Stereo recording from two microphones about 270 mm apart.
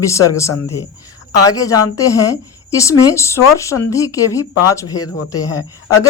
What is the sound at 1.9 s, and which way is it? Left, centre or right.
Speech, centre.